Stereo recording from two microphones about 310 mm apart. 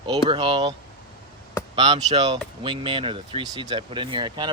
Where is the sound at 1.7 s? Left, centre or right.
Centre.